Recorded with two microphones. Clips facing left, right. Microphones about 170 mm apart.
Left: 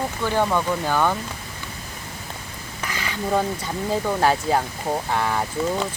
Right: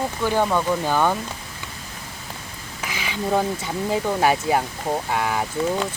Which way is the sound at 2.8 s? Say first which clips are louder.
Right 1 dB; 15° right (ahead or behind).